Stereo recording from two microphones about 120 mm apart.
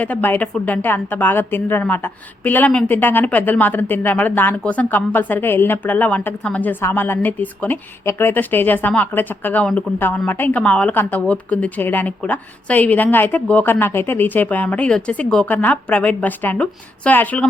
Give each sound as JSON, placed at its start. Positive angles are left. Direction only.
{"t": 0.0, "sound": "speech", "side_deg": 15}